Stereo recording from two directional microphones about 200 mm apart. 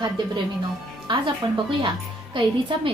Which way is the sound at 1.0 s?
25° right (ahead or behind).